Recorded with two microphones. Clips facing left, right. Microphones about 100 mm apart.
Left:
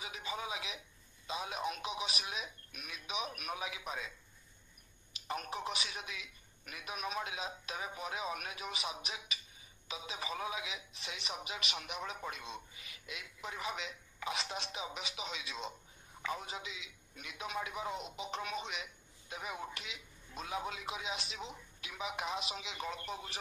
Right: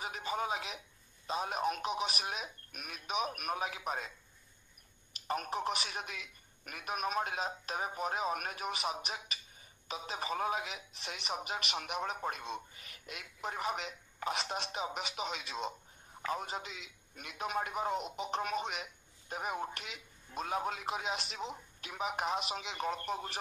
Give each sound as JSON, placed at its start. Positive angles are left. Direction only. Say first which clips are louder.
{"t": 0.0, "sound": "speech", "louder": "right 5 dB", "side_deg": -45}
{"t": 5.3, "sound": "speech", "louder": "right 4 dB", "side_deg": -45}